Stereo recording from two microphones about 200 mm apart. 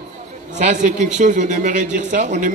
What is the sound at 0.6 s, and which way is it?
A man's voice, 35° right (ahead or behind).